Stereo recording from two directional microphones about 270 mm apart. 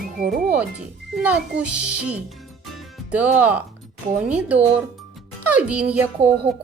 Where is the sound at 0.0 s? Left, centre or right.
Right.